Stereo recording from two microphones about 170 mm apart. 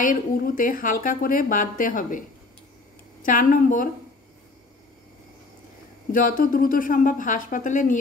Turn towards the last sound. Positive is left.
turn(degrees=50)  # may be behind; listen again after turning